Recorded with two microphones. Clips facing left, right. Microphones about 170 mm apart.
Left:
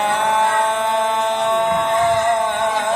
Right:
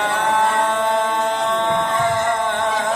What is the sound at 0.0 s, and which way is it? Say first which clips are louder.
Music: left 1 dB; 20° left (ahead or behind).